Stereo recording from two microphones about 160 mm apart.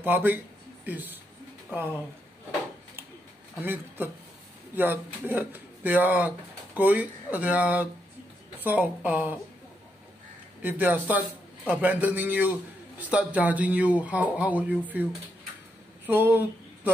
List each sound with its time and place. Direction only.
0.0 s speech: 10° right (ahead or behind)
3.6 s speech: 15° right (ahead or behind)
10.6 s speech: 10° right (ahead or behind)
16.1 s speech: 10° right (ahead or behind)